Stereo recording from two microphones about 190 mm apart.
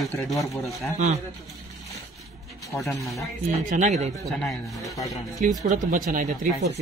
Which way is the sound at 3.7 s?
40° right (ahead or behind).